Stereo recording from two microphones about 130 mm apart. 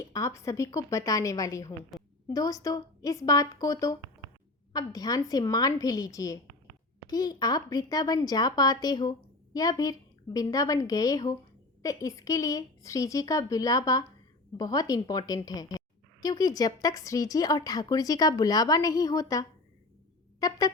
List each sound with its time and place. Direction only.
0.0 s speech: 25° left (ahead or behind)